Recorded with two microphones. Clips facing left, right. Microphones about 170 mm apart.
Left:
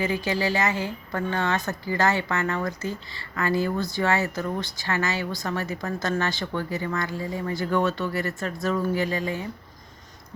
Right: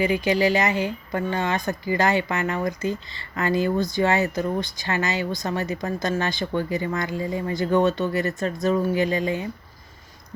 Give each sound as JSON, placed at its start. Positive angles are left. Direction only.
{"t": 0.0, "sound": "speech", "side_deg": -15}